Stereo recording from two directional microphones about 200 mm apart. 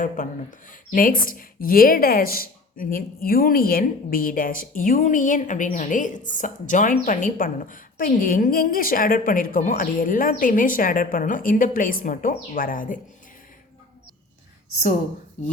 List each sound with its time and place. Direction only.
0.7 s a woman's voice: 45° left (ahead or behind)